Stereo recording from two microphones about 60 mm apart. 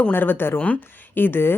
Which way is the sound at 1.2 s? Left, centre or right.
Left.